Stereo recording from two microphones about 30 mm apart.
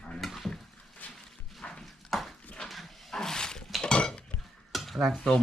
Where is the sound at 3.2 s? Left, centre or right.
Left.